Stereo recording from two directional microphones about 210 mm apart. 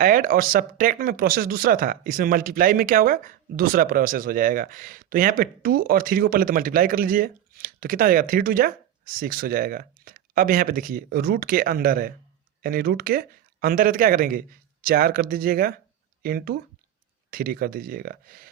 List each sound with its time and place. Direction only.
0.0 s speech: 40° right (ahead or behind)